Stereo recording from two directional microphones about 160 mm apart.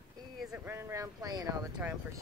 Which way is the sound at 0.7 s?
15° right (ahead or behind).